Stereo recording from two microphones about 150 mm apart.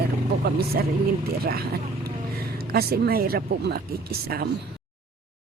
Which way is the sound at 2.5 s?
90° right.